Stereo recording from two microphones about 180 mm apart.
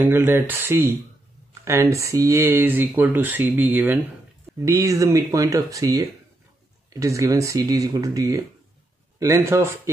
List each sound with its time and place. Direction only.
0.0 s speech: 10° right (ahead or behind)
6.9 s speech: 15° right (ahead or behind)